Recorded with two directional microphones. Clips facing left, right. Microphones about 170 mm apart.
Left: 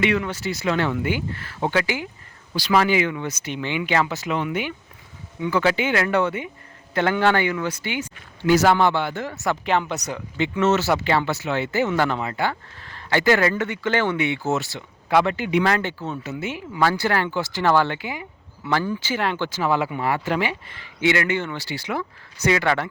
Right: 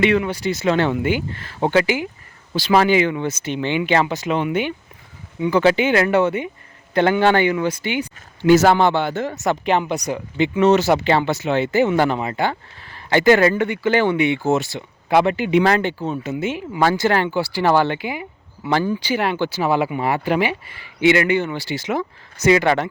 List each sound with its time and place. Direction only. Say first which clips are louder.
0.2 s speech: right 5 dB; 15° right (ahead or behind)
13.7 s speech: right 5 dB; 15° right (ahead or behind); by 15.8 s 30° right (ahead or behind)
15.8 s speech: right 5 dB; 15° right (ahead or behind)